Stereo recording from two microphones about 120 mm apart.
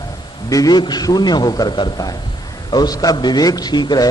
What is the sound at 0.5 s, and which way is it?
A man's voice, 35° left (ahead or behind).